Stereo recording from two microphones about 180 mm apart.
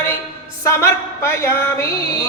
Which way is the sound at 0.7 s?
15° left (ahead or behind).